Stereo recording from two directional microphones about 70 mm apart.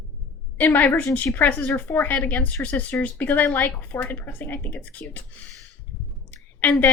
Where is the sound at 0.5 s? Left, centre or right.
Left.